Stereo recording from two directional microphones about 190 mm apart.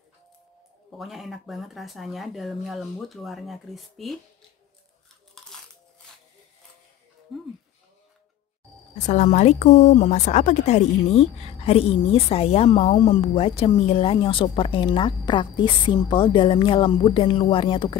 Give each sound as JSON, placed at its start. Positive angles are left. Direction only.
{"t": 0.9, "sound": "speech", "side_deg": 0}
{"t": 5.4, "sound": "crushing", "side_deg": 0}
{"t": 7.3, "sound": "a sound", "side_deg": 0}
{"t": 8.9, "sound": "a woman's voice", "side_deg": 40}